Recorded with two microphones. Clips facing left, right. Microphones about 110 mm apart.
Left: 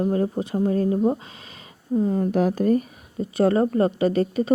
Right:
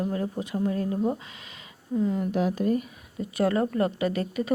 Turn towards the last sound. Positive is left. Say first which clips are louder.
# left 6 dB
turn(degrees=30)  # may be behind; listen again after turning